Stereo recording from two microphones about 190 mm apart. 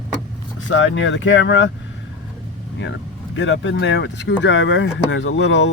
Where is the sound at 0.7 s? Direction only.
80° left.